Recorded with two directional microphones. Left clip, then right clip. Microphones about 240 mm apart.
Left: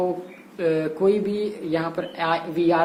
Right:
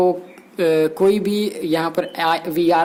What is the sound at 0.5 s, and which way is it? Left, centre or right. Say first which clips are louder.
Speech: right 6 dB; right.